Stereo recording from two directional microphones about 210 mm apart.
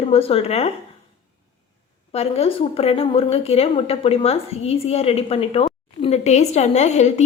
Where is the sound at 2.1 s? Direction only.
30° left (ahead or behind).